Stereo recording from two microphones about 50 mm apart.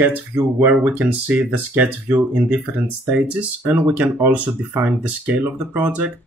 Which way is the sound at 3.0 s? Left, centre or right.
Right.